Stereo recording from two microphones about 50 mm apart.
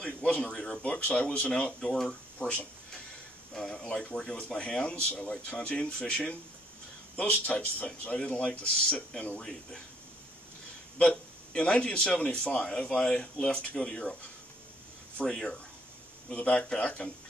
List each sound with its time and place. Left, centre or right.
0.0 s speech: left
11.0 s a man's voice: left
15.2 s speech: centre
16.3 s speech: left